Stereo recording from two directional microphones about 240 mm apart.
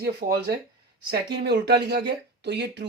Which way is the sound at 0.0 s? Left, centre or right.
Right.